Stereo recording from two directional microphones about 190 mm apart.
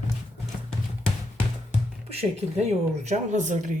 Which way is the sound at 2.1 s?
35° right (ahead or behind).